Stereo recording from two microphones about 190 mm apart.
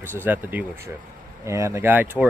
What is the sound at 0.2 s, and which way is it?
Speech, 10° right (ahead or behind).